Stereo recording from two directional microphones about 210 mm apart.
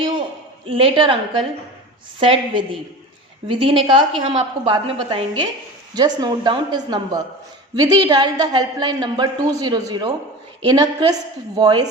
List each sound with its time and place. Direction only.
0.7 s a woman's voice: 25° right (ahead or behind)